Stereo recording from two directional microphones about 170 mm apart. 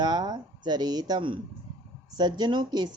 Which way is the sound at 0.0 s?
25° right (ahead or behind).